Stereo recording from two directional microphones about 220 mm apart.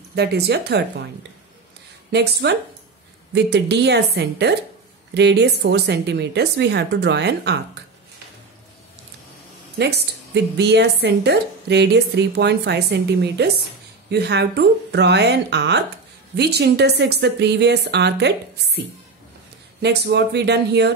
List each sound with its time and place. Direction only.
0.1 s a woman's voice: 50° right (ahead or behind)
2.0 s a woman's voice: 50° right (ahead or behind)
9.8 s a woman's voice: 50° right (ahead or behind)
19.8 s a woman's voice: 50° right (ahead or behind)